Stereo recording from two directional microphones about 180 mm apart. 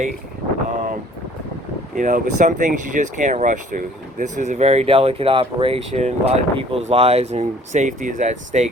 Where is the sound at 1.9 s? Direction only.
45° right (ahead or behind).